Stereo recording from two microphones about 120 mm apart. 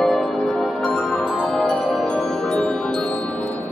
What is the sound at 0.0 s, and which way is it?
Music, centre (ahead or behind).